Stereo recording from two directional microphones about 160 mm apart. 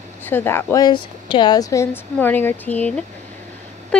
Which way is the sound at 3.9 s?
5° left (ahead or behind).